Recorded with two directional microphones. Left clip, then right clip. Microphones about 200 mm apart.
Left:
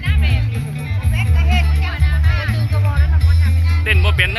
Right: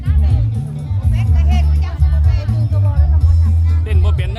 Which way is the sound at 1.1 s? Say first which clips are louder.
Left 5 dB; 25° right (ahead or behind).